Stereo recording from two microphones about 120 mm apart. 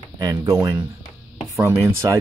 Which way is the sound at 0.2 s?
35° right (ahead or behind).